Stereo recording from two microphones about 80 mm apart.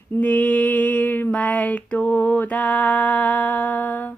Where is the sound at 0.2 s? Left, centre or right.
Centre.